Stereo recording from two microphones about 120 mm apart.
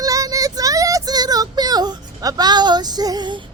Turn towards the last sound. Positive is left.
turn(degrees=-35)  # may be behind; listen again after turning